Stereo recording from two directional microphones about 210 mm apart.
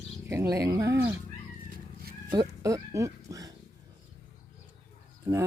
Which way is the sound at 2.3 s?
15° right (ahead or behind).